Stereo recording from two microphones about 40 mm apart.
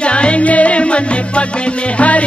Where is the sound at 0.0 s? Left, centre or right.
Left.